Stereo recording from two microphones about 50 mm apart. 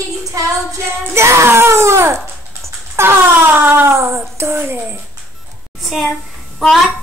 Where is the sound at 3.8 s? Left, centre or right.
Right.